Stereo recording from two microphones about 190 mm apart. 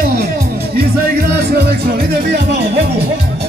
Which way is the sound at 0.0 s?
60° right (ahead or behind).